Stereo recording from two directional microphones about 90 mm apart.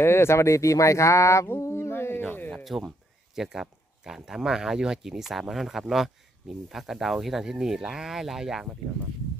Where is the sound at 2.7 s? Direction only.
Centre (ahead or behind).